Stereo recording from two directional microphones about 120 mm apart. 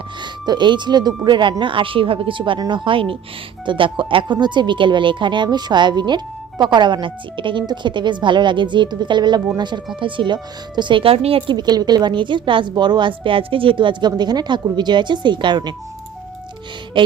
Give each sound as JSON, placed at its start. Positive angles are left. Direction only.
{"t": 0.2, "sound": "speech", "side_deg": -40}